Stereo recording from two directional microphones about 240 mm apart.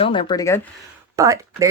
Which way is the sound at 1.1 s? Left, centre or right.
Centre.